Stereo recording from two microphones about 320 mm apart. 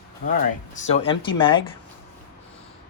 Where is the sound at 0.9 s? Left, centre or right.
Centre.